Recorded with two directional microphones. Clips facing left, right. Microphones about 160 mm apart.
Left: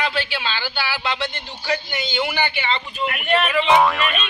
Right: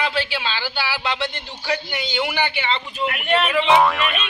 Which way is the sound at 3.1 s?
20° right (ahead or behind).